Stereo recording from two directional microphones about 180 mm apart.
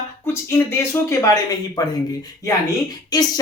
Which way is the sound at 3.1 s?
20° left (ahead or behind).